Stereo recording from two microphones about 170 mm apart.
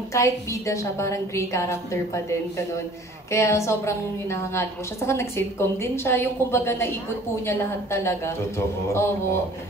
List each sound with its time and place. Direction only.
0.1 s a woman's voice: 20° left (ahead or behind)